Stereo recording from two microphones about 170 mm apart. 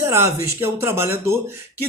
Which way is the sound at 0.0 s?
15° right (ahead or behind).